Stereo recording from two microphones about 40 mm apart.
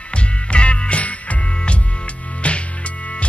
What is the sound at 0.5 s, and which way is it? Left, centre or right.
Music, left.